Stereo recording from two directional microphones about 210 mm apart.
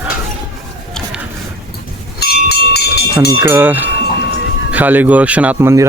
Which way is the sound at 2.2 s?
50° left (ahead or behind).